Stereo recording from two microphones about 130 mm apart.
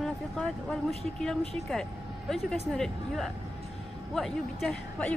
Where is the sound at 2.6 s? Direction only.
Centre (ahead or behind).